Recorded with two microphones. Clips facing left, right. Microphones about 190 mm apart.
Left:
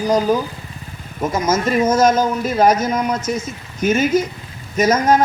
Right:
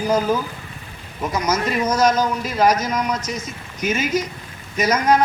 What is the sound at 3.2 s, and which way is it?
A man's voice, 55° left (ahead or behind).